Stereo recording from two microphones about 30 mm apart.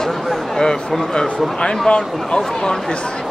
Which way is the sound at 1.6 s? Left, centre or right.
Left.